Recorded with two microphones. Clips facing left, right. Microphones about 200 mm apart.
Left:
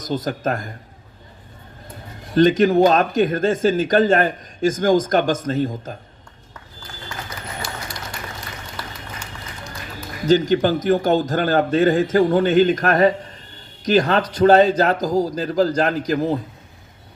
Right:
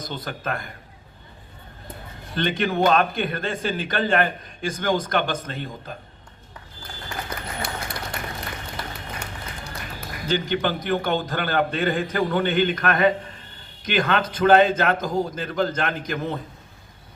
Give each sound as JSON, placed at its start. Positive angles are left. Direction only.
{"t": 0.0, "sound": "a man's voice", "side_deg": 40}
{"t": 2.3, "sound": "a man's voice", "side_deg": 40}
{"t": 7.6, "sound": "a sound", "side_deg": -55}
{"t": 10.2, "sound": "a man's voice", "side_deg": 40}